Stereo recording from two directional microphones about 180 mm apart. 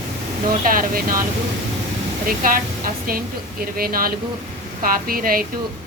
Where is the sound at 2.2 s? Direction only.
50° right (ahead or behind).